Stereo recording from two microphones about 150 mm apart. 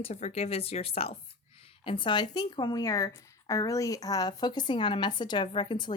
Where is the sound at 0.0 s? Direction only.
50° left (ahead or behind).